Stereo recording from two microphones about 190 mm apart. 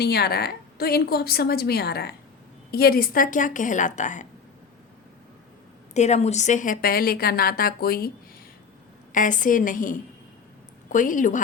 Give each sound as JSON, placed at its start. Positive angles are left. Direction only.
{"t": 0.0, "sound": "a woman's voice", "side_deg": 60}
{"t": 5.9, "sound": "speech", "side_deg": 35}
{"t": 9.1, "sound": "a woman's voice", "side_deg": 45}